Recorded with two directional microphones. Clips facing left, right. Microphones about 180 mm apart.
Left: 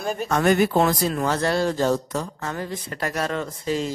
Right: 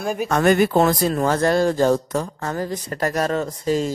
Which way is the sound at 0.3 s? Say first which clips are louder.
Right 2 dB; 55° right (ahead or behind).